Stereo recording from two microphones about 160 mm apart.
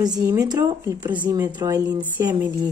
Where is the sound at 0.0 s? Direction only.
25° right (ahead or behind).